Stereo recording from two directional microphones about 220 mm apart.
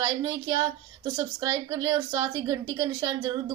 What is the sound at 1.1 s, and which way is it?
A woman's voice, 20° right (ahead or behind).